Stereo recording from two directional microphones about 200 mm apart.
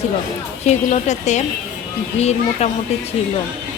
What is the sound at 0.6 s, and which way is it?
Speech, 35° left (ahead or behind).